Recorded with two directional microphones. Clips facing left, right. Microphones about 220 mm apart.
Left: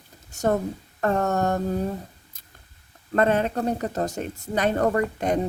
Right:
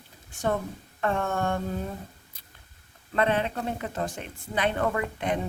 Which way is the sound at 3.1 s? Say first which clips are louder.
Left 4 dB; 45° left (ahead or behind).